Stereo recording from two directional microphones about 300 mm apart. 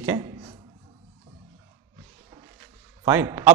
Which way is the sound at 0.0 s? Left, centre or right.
Centre.